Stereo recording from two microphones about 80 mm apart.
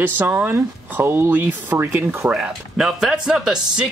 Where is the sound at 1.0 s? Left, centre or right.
Right.